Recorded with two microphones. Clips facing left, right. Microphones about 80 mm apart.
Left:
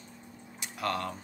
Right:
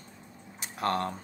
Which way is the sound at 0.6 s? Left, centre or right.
Right.